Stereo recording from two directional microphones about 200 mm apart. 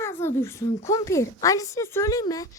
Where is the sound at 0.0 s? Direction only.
10° left (ahead or behind).